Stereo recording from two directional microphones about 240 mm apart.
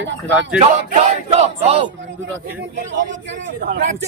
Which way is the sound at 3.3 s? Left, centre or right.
Right.